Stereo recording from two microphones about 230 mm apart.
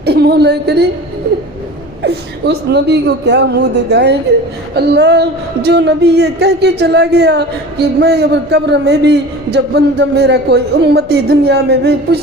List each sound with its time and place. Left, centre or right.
0.0 s speech: right
2.0 s speech: right